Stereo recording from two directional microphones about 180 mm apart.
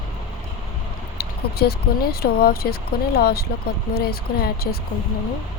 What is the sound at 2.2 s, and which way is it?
Speech, 60° left (ahead or behind).